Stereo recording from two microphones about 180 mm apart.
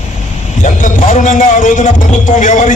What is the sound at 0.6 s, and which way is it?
A man's voice, 45° left (ahead or behind).